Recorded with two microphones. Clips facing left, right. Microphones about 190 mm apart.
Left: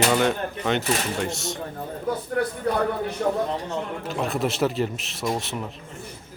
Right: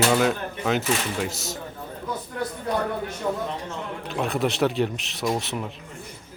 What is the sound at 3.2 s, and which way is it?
Speech, 50° left (ahead or behind).